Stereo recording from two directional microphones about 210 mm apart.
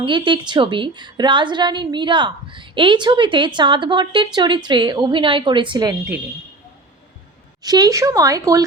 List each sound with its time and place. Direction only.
0.0 s a woman's voice: 25° right (ahead or behind)
7.6 s speech: 20° right (ahead or behind)